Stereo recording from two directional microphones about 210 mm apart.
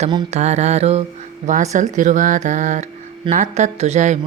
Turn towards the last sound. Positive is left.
turn(degrees=-35)  # may be behind; listen again after turning